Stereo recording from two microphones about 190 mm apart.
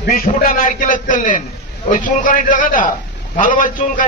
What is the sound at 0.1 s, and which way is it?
A man's voice, 50° left (ahead or behind).